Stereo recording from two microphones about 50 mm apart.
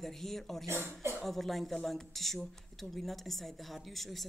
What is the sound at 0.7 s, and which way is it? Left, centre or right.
Speech, right.